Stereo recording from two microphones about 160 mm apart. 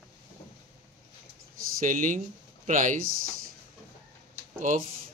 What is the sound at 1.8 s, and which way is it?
Speech, 55° right (ahead or behind).